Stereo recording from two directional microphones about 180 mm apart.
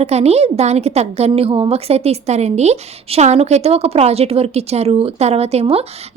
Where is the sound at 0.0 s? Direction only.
35° right (ahead or behind).